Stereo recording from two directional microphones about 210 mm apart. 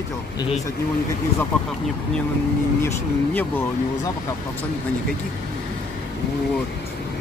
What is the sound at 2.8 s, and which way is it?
Speech, 10° left (ahead or behind).